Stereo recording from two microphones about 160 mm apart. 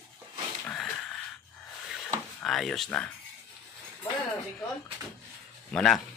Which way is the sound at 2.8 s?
10° left (ahead or behind).